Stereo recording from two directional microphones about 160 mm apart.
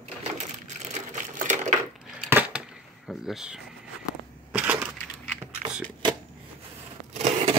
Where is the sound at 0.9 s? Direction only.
55° right (ahead or behind).